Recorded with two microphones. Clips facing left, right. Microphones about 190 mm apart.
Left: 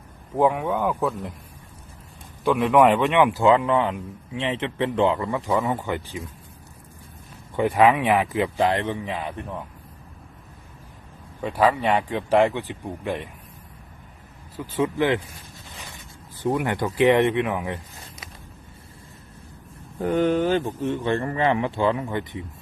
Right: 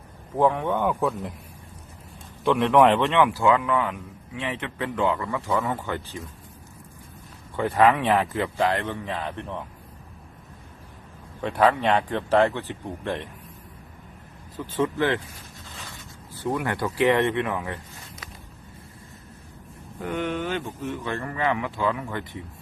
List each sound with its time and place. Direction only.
0.3 s speech: 10° left (ahead or behind)
2.4 s a man's voice: 5° left (ahead or behind)
7.5 s a man's voice: 15° left (ahead or behind)
11.4 s a man's voice: 5° left (ahead or behind)
14.5 s a man's voice: 10° left (ahead or behind)
15.7 s a sound: 15° left (ahead or behind)
16.4 s a man's voice: 15° left (ahead or behind)
20.0 s speech: 35° left (ahead or behind); by 22.4 s 20° left (ahead or behind)